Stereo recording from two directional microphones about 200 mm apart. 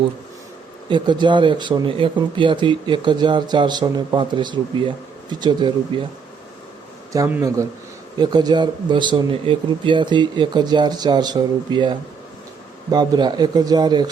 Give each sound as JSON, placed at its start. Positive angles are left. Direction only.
{"t": 0.9, "sound": "speech", "side_deg": -25}
{"t": 7.1, "sound": "speech", "side_deg": -10}